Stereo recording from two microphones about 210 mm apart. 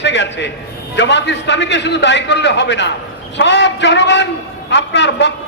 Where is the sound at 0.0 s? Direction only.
60° left (ahead or behind).